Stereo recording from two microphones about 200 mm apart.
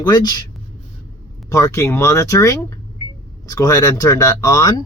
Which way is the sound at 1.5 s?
15° left (ahead or behind).